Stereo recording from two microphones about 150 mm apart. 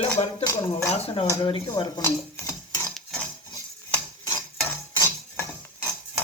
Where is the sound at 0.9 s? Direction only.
40° left (ahead or behind).